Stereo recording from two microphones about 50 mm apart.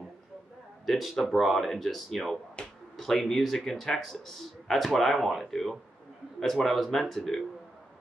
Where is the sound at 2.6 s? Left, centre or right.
Centre.